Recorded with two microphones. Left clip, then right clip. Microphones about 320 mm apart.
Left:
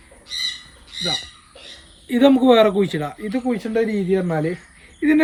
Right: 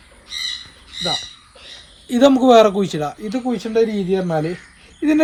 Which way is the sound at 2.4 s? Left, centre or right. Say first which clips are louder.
Right 3 dB; centre.